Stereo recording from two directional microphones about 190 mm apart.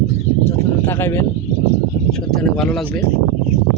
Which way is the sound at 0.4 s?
15° left (ahead or behind).